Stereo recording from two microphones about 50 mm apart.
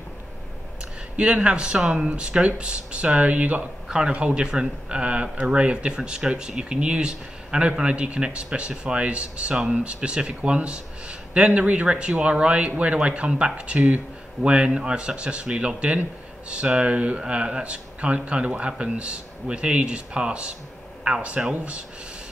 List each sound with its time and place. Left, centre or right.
1.1 s speech: right
4.4 s speech: centre